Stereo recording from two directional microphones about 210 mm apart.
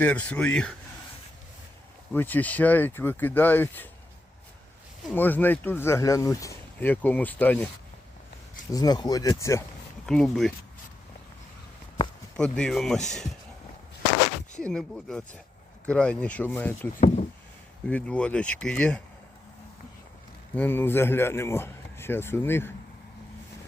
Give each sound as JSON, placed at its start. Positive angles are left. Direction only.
{"t": 0.0, "sound": "speech", "side_deg": 5}
{"t": 2.1, "sound": "speech", "side_deg": 10}
{"t": 5.1, "sound": "speech", "side_deg": 10}
{"t": 8.7, "sound": "speech", "side_deg": 20}
{"t": 10.1, "sound": "speech", "side_deg": 0}
{"t": 12.4, "sound": "speech", "side_deg": 5}
{"t": 14.6, "sound": "speech", "side_deg": 5}
{"t": 20.6, "sound": "speech", "side_deg": 10}